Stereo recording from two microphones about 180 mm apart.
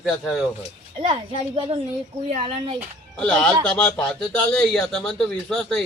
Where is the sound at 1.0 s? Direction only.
30° right (ahead or behind).